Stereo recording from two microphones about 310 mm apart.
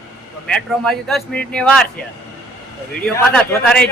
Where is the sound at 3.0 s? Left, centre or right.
Centre.